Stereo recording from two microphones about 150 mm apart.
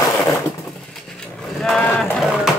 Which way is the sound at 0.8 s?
5° left (ahead or behind).